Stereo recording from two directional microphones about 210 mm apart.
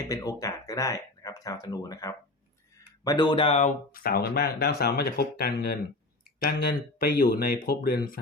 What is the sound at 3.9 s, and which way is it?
Speech, 45° left (ahead or behind).